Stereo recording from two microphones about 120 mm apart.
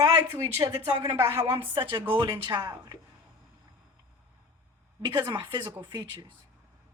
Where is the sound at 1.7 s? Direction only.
40° right (ahead or behind).